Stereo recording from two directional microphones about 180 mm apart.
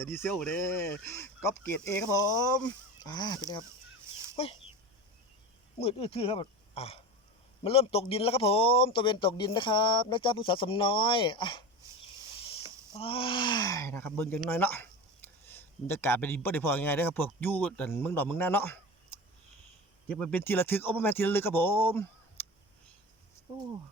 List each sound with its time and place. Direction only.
0.0 s a man's voice: 15° left (ahead or behind)
5.8 s a man's voice: 30° left (ahead or behind)
13.0 s a man's voice: 30° left (ahead or behind); by 18.8 s 10° left (ahead or behind)
20.1 s speech: 10° left (ahead or behind)